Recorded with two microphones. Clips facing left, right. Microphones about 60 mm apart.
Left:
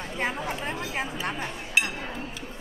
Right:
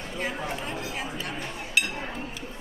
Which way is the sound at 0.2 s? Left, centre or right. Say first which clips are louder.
Left 2 dB; left.